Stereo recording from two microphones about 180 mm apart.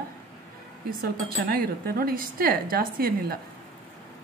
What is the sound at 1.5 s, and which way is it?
A woman's voice, 55° right (ahead or behind).